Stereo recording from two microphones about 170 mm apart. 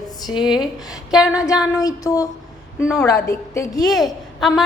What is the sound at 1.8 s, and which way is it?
A woman's voice, 20° left (ahead or behind).